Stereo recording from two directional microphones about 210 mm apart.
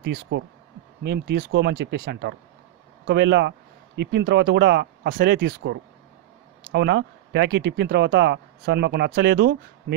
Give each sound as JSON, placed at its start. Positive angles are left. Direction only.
{"t": 0.3, "sound": "speech", "side_deg": -55}